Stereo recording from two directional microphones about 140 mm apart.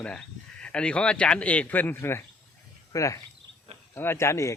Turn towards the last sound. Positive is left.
turn(degrees=20)  # may be behind; listen again after turning